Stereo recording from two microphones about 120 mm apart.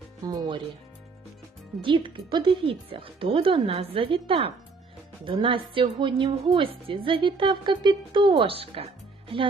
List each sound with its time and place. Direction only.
0.3 s speech: 40° right (ahead or behind)
1.8 s a woman's voice: 45° right (ahead or behind)